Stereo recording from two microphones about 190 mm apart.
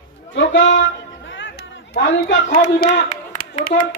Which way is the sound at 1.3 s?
80° left.